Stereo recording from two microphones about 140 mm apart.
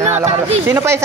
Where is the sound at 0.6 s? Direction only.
20° right (ahead or behind).